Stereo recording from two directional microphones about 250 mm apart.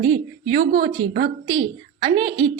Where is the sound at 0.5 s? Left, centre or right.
Right.